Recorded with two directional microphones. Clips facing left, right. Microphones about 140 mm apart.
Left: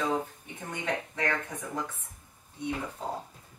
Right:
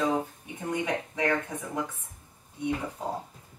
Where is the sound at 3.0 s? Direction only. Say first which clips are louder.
Right 2 dB; 10° right (ahead or behind).